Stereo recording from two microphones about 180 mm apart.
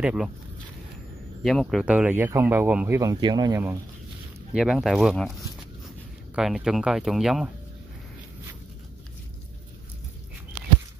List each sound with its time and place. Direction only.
0.0 s speech: 5° right (ahead or behind)
1.4 s speech: centre (ahead or behind)
3.0 s speech: 20° right (ahead or behind)
4.6 s speech: centre (ahead or behind)
6.3 s speech: centre (ahead or behind)